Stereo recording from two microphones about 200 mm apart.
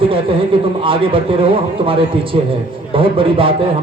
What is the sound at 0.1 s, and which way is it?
A man's voice, 25° right (ahead or behind).